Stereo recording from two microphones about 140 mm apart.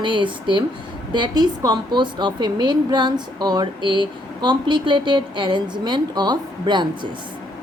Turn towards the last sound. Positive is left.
turn(degrees=-30)  # may be behind; listen again after turning